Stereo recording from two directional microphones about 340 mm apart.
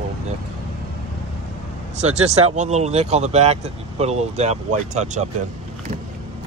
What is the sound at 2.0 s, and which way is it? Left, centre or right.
Speech, centre.